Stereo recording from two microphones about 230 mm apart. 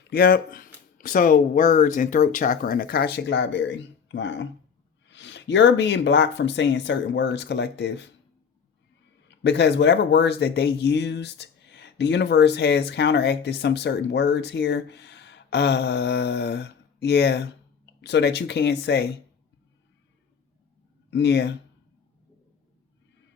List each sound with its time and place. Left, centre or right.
0.1 s speech: left
9.2 s speech: left
21.1 s speech: left